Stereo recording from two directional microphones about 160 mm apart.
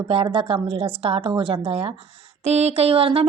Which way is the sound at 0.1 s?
35° right (ahead or behind).